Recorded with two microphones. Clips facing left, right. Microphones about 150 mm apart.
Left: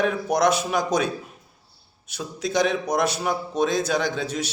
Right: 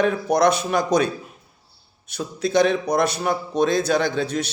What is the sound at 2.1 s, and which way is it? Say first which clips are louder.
A man's voice: right 4 dB; 10° left (ahead or behind).